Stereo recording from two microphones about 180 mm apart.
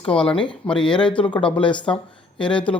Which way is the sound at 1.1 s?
25° left (ahead or behind).